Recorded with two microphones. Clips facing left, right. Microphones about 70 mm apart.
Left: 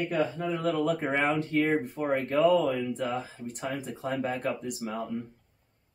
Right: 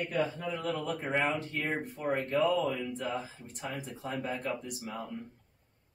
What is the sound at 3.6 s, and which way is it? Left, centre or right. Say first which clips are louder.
Speech: left 5 dB; left.